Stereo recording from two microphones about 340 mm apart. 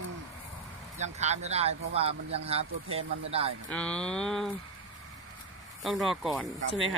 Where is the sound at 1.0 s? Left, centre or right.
Centre.